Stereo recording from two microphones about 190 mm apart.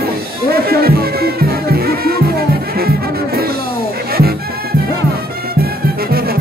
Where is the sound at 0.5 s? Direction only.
55° right (ahead or behind).